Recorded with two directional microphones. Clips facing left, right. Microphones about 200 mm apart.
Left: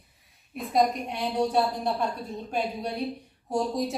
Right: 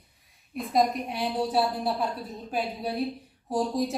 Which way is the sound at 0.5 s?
Centre (ahead or behind).